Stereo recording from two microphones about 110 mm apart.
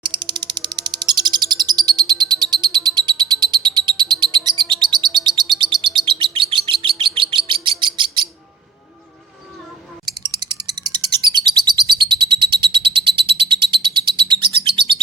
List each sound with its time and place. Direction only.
0.0 s bird: 45° right (ahead or behind)
3.4 s a sound: 40° right (ahead or behind)
3.8 s bird: 45° right (ahead or behind)
10.4 s bird: 40° right (ahead or behind)